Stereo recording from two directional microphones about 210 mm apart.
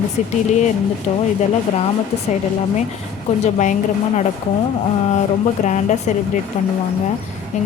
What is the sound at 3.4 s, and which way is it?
Speech, 35° left (ahead or behind).